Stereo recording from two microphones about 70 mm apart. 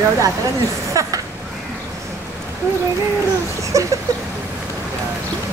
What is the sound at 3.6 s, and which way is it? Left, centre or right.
Speech, right.